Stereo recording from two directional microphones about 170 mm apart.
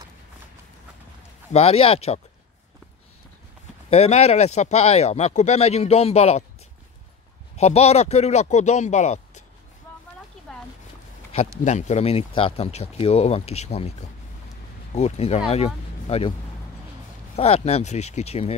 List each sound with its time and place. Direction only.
1.5 s speech: 35° left (ahead or behind)
3.9 s speech: 40° left (ahead or behind)
7.5 s speech: 40° left (ahead or behind)
11.6 s speech: 40° left (ahead or behind)
15.0 s speech: 40° left (ahead or behind)
17.4 s speech: 35° left (ahead or behind)